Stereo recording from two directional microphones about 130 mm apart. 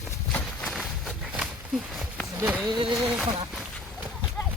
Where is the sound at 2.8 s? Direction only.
5° right (ahead or behind).